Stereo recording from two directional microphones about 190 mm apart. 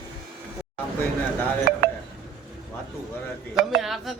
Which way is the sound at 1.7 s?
55° right (ahead or behind).